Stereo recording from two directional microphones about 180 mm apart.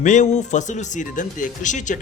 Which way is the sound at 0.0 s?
45° left (ahead or behind).